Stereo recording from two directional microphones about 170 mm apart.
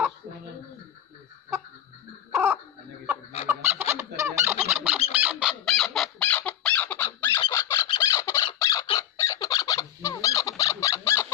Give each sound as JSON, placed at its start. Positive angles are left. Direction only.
{"t": 2.3, "sound": "a sound", "side_deg": -15}
{"t": 3.4, "sound": "fowl", "side_deg": -10}
{"t": 5.1, "sound": "chicken", "side_deg": -10}
{"t": 8.0, "sound": "squawk", "side_deg": 15}